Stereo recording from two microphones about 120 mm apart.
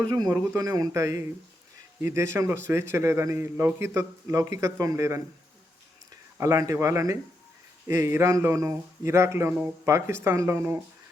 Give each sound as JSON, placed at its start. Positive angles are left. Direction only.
{"t": 0.0, "sound": "a man's voice", "side_deg": -35}
{"t": 6.3, "sound": "a man's voice", "side_deg": -25}